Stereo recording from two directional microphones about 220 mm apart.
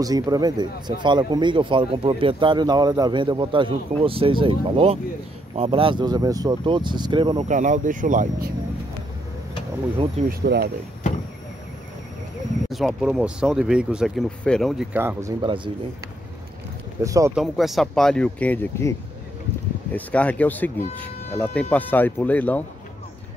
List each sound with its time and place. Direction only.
0.0 s a man's voice: 15° right (ahead or behind)
7.4 s speech: 35° right (ahead or behind)
10.4 s speech: 50° right (ahead or behind)
12.6 s speech: centre (ahead or behind); by 15.7 s 20° right (ahead or behind)
17.0 s speech: 15° right (ahead or behind)
17.4 s speech: centre (ahead or behind)